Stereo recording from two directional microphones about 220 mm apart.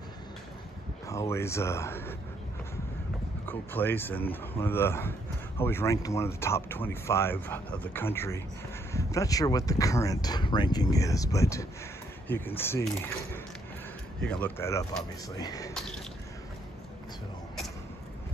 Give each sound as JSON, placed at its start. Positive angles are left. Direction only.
{"t": 1.0, "sound": "speech", "side_deg": 15}
{"t": 3.4, "sound": "speech", "side_deg": 10}